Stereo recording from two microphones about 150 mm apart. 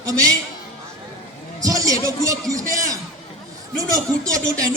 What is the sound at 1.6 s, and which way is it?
Speech, 25° right (ahead or behind).